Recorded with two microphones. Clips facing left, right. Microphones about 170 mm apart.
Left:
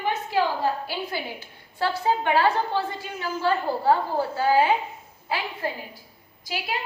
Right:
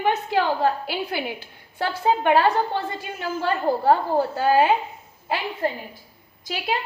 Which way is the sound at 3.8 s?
50° right (ahead or behind).